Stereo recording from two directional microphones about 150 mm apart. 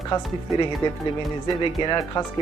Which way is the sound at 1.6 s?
30° left (ahead or behind).